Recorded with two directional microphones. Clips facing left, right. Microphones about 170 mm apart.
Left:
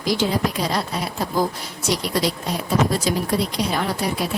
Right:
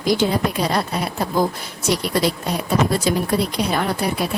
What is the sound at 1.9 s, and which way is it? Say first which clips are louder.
A woman's voice: right 2 dB; 60° right (ahead or behind).